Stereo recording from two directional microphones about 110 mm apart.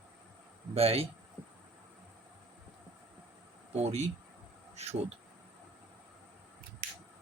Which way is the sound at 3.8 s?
80° right.